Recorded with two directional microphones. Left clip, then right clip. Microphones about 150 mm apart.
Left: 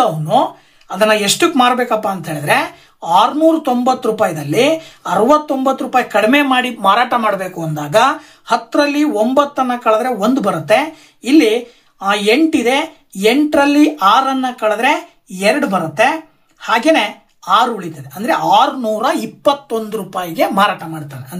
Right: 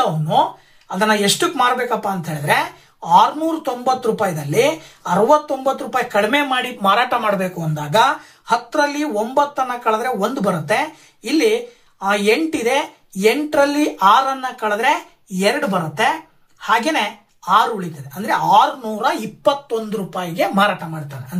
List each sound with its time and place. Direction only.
0.0 s speech: 35° left (ahead or behind)